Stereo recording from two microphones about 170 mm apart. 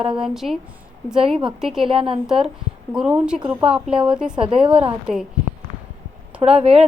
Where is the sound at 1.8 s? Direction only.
30° right (ahead or behind).